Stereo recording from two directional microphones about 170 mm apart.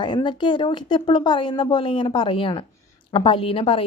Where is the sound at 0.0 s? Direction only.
25° left (ahead or behind).